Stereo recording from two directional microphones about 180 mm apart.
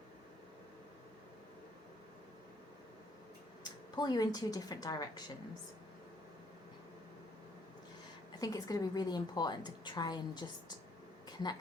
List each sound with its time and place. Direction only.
3.6 s a woman's voice: 25° left (ahead or behind)
8.4 s a woman's voice: 20° left (ahead or behind)